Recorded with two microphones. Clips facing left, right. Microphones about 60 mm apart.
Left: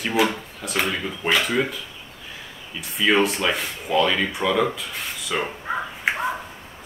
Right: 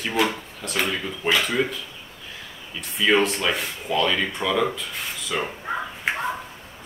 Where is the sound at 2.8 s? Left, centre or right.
Centre.